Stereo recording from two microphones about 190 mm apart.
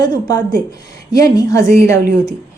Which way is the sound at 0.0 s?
20° left (ahead or behind).